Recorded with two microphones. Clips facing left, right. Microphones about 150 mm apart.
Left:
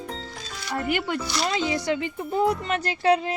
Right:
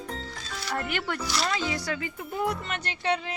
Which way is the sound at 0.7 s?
10° left (ahead or behind).